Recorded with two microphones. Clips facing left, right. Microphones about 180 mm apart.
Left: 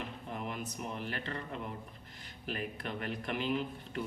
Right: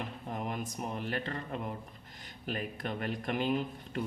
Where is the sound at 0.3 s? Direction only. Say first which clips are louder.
Right 3 dB; 45° right (ahead or behind).